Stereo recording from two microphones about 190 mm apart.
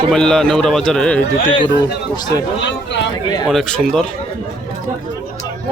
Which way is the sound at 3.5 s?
5° left (ahead or behind).